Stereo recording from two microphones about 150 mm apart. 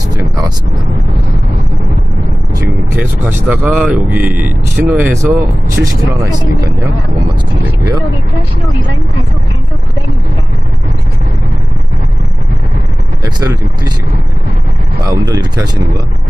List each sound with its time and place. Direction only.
2.9 s speech: 15° right (ahead or behind)
13.2 s speech: 25° right (ahead or behind)
15.0 s speech: 25° right (ahead or behind)